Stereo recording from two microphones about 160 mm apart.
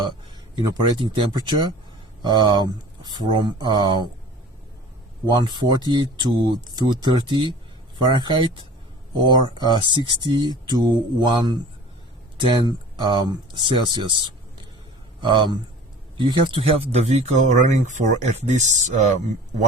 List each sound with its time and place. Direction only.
0.5 s speech: 25° right (ahead or behind)
5.3 s speech: 30° right (ahead or behind)
15.2 s speech: 30° right (ahead or behind); by 19.6 s 45° right (ahead or behind)